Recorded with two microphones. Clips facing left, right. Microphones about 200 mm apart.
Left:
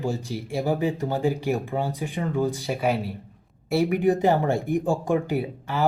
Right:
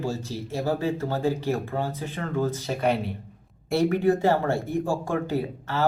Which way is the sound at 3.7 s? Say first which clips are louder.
Even; 10° left (ahead or behind).